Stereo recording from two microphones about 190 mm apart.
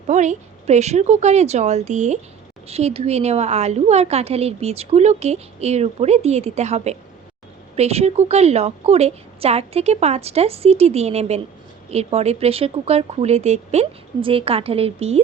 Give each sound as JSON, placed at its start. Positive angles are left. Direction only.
{"t": 0.1, "sound": "a woman's voice", "side_deg": -40}